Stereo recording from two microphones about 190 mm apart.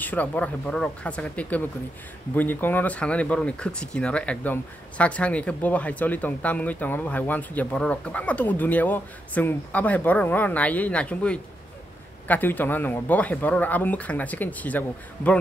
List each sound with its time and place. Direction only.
0.0 s speech: 10° left (ahead or behind)